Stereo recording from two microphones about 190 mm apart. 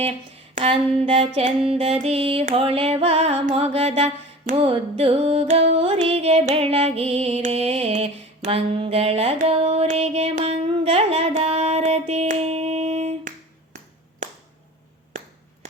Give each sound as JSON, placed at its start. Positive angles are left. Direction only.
{"t": 0.5, "sound": "music", "side_deg": -30}